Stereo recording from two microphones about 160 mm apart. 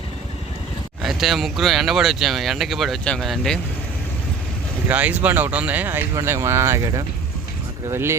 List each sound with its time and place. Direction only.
1.0 s speech: centre (ahead or behind)
4.9 s speech: 10° right (ahead or behind)